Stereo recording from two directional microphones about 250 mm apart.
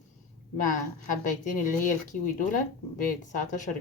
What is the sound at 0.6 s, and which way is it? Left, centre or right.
Speech, left.